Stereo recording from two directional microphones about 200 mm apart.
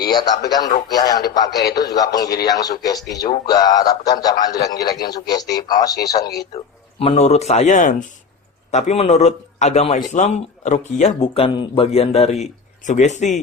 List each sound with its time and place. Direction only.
0.0 s a man's voice: 20° left (ahead or behind)
7.0 s speech: 30° left (ahead or behind)